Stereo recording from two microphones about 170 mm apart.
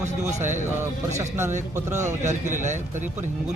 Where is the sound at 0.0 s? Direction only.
45° right (ahead or behind).